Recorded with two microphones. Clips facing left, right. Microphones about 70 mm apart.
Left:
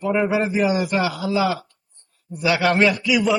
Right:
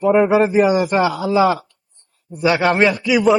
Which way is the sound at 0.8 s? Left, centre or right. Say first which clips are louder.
Right 5 dB; right.